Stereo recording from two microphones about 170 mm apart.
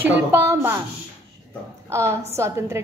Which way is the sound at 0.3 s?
15° right (ahead or behind).